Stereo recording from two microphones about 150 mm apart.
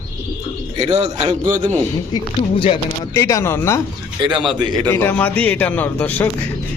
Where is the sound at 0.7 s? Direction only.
45° right (ahead or behind).